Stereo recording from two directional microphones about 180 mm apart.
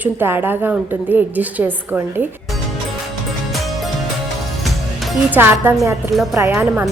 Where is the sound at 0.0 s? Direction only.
10° right (ahead or behind).